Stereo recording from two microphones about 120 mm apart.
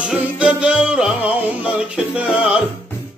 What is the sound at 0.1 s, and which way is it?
Music, 10° right (ahead or behind).